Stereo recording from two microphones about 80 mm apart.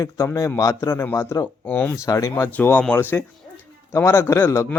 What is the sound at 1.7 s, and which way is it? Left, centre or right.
Speech, left.